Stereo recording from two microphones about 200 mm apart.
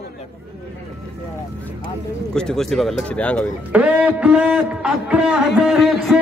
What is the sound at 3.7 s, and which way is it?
A man's voice, 5° right (ahead or behind).